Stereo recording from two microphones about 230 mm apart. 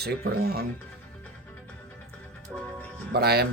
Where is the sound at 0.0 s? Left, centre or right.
Right.